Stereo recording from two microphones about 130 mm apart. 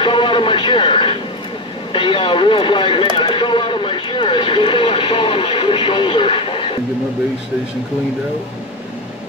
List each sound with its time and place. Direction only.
0.0 s radio: 40° left (ahead or behind)
1.9 s vehicle: 40° left (ahead or behind)